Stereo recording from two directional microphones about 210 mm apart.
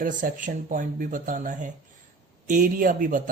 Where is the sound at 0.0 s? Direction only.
40° right (ahead or behind).